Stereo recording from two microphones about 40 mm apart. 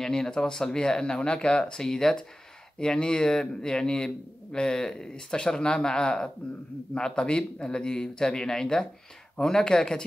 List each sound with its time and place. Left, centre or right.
0.0 s a man's voice: centre